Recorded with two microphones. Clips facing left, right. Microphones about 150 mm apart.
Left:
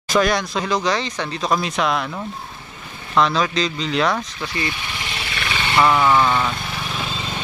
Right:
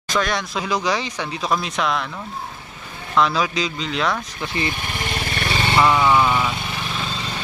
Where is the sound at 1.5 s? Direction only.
Centre (ahead or behind).